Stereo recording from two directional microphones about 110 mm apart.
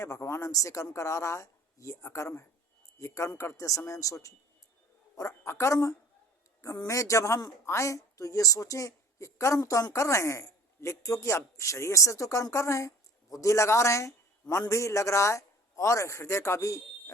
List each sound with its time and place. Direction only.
0.0 s a woman's voice: 25° left (ahead or behind)